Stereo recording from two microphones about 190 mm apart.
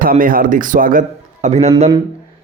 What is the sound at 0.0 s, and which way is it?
A man's voice, 45° right (ahead or behind).